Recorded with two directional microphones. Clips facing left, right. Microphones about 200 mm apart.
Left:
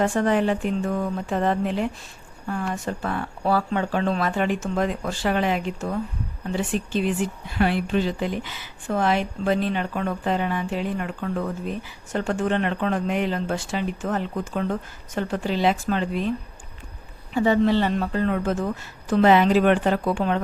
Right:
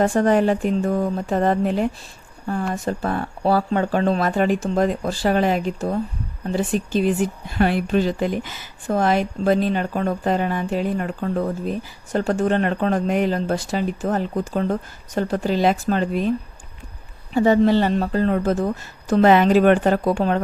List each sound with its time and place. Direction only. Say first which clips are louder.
0.0 s speech: right 4 dB; 40° right (ahead or behind)
17.3 s speech: right 4 dB; 40° right (ahead or behind)